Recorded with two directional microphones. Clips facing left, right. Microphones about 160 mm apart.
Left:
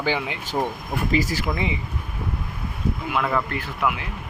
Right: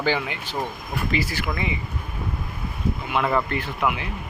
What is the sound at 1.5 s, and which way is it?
Speech, 25° left (ahead or behind).